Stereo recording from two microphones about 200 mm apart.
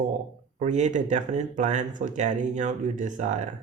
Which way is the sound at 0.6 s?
35° right (ahead or behind).